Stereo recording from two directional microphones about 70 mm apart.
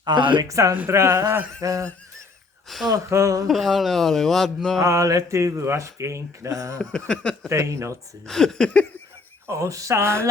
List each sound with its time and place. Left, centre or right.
0.0 s speech: right
0.4 s a man's voice: right
1.6 s speech: right
2.6 s speech: centre
3.1 s speech: right
3.4 s speech: centre
4.8 s speech: right
6.7 s a sound: centre
7.5 s speech: right
8.3 s a sound: centre
9.5 s speech: right